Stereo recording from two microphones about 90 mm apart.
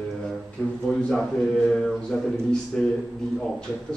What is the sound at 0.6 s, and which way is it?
A man's voice, 15° left (ahead or behind).